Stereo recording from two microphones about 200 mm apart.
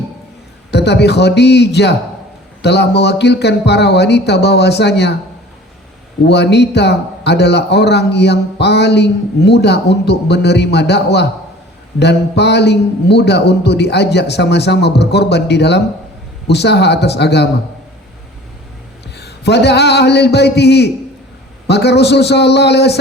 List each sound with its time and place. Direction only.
0.7 s a man's voice: 55° left (ahead or behind)
6.2 s a man's voice: 55° left (ahead or behind)
19.1 s a man's voice: 55° left (ahead or behind)